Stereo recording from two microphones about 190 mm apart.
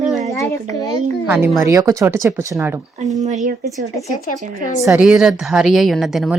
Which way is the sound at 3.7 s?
Centre (ahead or behind).